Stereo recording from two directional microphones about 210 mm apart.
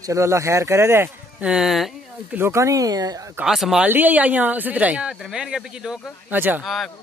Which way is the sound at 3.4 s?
Centre (ahead or behind).